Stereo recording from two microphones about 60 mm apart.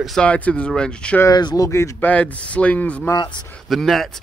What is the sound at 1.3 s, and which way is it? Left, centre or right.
Speech, left.